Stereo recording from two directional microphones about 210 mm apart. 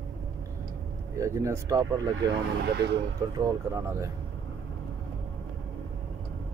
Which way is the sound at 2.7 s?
55° right (ahead or behind).